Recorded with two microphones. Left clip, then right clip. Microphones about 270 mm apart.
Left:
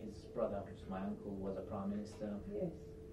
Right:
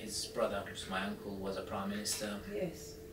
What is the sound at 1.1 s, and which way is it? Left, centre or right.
Speech, left.